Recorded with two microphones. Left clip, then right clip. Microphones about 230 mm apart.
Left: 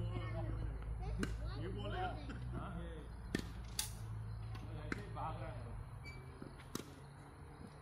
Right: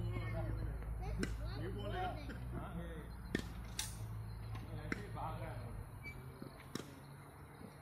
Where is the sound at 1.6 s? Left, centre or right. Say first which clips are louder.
Right 1 dB; left.